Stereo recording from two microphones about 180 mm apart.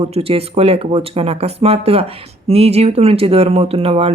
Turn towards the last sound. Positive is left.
turn(degrees=-30)  # may be behind; listen again after turning